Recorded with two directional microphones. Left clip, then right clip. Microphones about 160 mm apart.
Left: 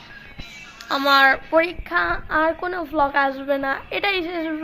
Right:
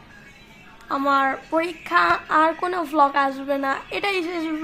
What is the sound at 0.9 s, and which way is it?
A woman's voice, 5° right (ahead or behind).